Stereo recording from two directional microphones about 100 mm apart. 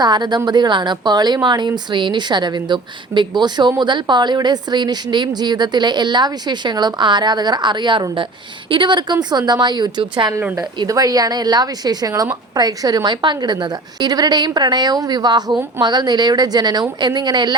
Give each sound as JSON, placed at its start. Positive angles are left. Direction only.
{"t": 0.0, "sound": "speech", "side_deg": -45}
{"t": 10.8, "sound": "a woman's voice", "side_deg": -40}